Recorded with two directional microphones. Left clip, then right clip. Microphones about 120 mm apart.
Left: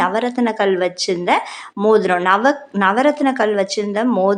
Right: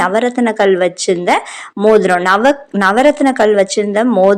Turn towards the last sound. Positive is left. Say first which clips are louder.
# right 6 dB
turn(degrees=-35)  # may be behind; listen again after turning